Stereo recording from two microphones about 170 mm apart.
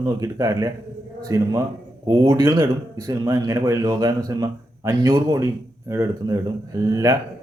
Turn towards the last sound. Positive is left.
turn(degrees=-20)  # may be behind; listen again after turning